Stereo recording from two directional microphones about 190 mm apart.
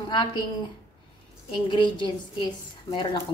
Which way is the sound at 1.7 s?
25° left (ahead or behind).